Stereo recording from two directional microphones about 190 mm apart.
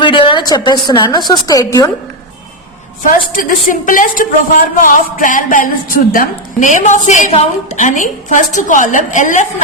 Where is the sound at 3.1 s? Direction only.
45° left (ahead or behind).